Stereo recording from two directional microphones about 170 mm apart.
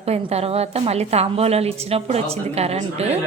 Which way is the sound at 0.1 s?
40° right (ahead or behind).